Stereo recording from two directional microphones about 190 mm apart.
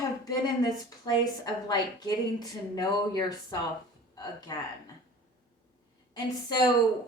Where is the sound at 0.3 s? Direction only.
20° left (ahead or behind).